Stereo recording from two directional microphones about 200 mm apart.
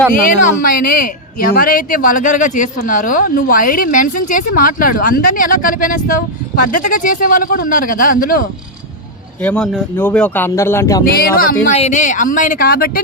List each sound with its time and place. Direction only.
0.1 s speech: 40° left (ahead or behind)
9.4 s speech: 5° left (ahead or behind)
11.0 s speech: 45° left (ahead or behind)